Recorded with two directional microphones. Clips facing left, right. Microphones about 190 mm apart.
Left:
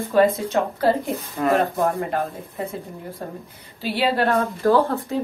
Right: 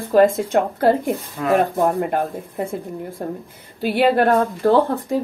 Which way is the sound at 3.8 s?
50° right (ahead or behind).